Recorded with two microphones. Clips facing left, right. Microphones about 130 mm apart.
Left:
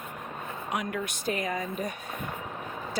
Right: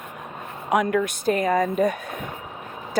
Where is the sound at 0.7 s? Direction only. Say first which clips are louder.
Right 12 dB; 70° right (ahead or behind); by 1.9 s 85° right.